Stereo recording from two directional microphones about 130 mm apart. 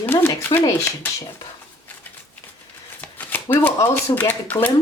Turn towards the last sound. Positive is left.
turn(degrees=15)  # may be behind; listen again after turning